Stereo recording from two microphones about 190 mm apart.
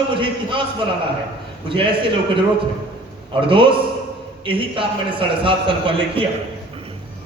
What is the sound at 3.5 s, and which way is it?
A man's voice, 25° right (ahead or behind).